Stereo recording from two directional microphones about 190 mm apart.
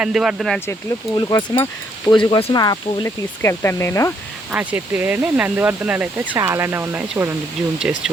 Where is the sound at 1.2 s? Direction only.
20° left (ahead or behind).